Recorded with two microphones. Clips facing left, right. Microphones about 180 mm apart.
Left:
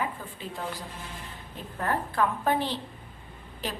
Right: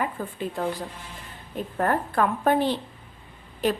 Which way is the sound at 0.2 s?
55° right (ahead or behind).